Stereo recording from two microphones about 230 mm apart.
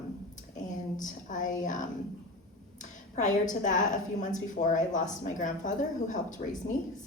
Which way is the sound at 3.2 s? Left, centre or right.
Left.